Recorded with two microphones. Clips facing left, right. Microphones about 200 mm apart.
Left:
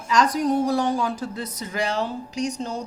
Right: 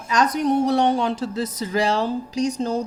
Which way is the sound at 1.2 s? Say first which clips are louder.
Right 5 dB; 90° right.